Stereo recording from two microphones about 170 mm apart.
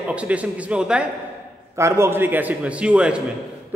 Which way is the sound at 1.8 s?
15° right (ahead or behind).